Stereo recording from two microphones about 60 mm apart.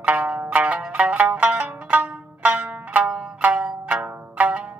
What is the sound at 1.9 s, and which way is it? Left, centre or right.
Music, right.